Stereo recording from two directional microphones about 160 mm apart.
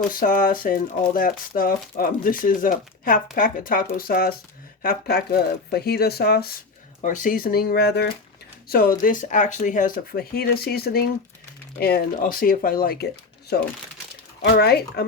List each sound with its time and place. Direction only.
0.1 s speech: 60° left (ahead or behind); by 6.5 s 80° left
7.0 s speech: 55° left (ahead or behind); by 8.1 s 90° left
8.7 s speech: 60° left (ahead or behind)
13.5 s speech: 90° left